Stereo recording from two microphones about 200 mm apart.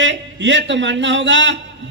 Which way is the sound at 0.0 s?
65° right (ahead or behind).